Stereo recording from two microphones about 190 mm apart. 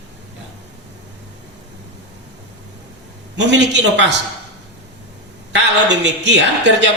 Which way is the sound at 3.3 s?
65° right (ahead or behind).